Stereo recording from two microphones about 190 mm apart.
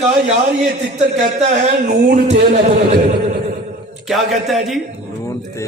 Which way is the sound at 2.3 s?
40° right (ahead or behind).